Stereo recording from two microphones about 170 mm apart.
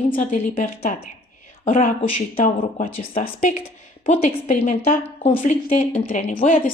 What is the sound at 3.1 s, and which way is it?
A woman's voice, 40° left (ahead or behind).